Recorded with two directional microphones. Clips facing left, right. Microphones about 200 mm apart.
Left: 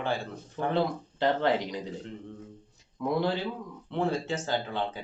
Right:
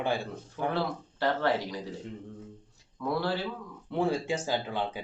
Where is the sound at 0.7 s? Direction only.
15° left (ahead or behind).